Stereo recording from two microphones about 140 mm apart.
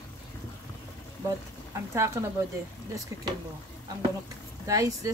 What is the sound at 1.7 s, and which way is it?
Speech, 20° right (ahead or behind).